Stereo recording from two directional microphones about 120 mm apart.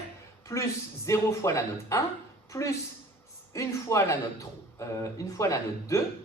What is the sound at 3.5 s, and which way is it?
A man's voice, 25° left (ahead or behind).